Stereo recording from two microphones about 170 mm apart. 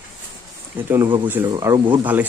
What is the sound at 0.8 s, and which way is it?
Speech, 10° right (ahead or behind).